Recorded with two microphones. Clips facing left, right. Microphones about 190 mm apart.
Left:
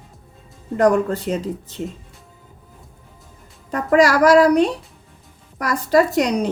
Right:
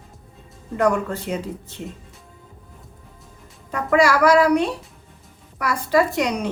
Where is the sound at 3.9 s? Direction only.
40° left (ahead or behind).